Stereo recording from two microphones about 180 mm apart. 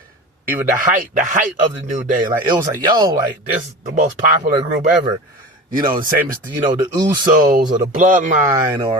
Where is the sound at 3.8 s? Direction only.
45° right (ahead or behind).